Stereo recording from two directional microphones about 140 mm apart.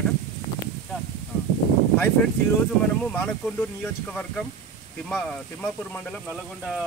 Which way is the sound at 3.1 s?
10° left (ahead or behind).